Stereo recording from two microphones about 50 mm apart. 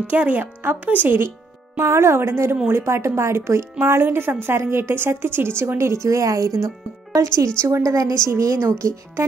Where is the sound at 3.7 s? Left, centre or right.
Right.